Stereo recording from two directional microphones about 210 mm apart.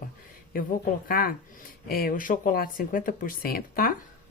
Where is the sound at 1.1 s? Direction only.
45° left (ahead or behind).